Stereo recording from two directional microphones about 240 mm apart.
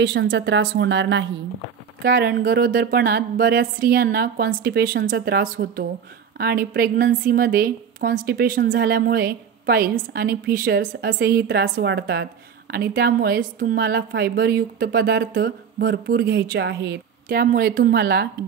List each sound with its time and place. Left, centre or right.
0.0 s a woman's voice: right